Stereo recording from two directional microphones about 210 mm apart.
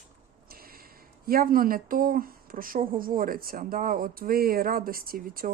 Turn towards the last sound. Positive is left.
turn(degrees=-45)  # may be behind; listen again after turning